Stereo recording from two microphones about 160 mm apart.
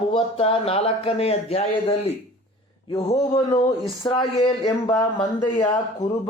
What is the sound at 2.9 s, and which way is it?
A woman's voice, 25° left (ahead or behind).